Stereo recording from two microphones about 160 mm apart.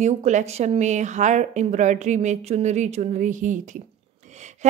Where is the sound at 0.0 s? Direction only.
45° right (ahead or behind).